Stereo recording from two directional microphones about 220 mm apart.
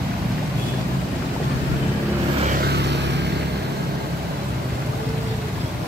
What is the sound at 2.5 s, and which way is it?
Vehicle, 45° right (ahead or behind).